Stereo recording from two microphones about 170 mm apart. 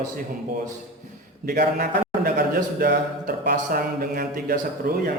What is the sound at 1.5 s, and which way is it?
A man's voice, 60° right (ahead or behind).